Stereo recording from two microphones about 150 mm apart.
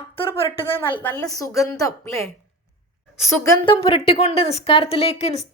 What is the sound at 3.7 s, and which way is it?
Speech, 35° left (ahead or behind).